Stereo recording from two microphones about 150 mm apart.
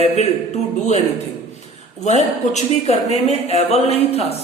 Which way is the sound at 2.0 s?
50° left (ahead or behind).